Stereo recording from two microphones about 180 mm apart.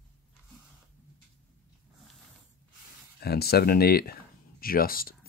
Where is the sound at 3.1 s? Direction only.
60° left (ahead or behind).